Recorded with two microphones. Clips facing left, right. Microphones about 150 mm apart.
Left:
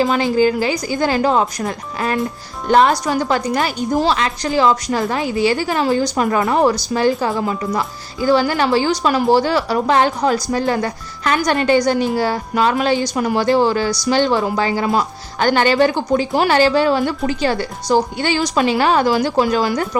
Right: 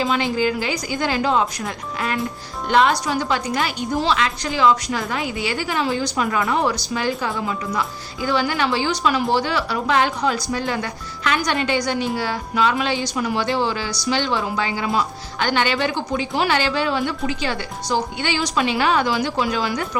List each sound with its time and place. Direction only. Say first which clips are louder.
0.0 s a woman's voice: left 5 dB; 40° left (ahead or behind)